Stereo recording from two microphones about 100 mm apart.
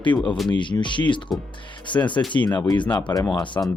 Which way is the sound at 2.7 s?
50° left (ahead or behind).